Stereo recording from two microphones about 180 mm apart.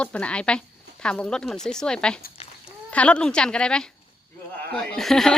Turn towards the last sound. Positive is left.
turn(degrees=0)  # may be behind; listen again after turning